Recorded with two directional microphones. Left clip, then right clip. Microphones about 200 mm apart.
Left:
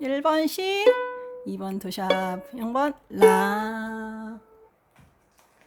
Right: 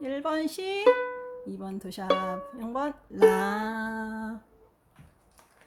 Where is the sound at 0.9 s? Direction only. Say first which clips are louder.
Left 1 dB; 15° left (ahead or behind).